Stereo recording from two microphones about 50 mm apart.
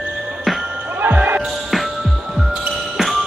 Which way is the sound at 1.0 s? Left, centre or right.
Right.